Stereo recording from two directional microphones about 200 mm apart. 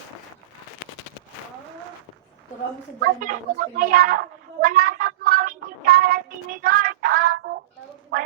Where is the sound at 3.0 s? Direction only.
45° right (ahead or behind).